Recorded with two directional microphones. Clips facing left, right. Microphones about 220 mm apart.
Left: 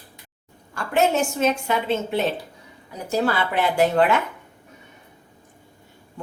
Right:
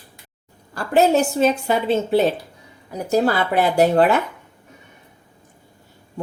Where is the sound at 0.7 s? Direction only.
35° right (ahead or behind).